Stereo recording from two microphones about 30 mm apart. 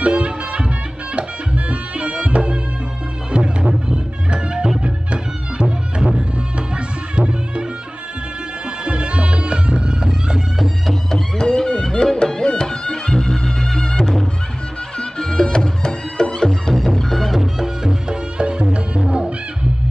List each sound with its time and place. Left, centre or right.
0.0 s music: right
8.6 s music: right
11.3 s music: left
13.7 s neigh: left
15.0 s music: left
16.7 s music: centre
17.8 s music: right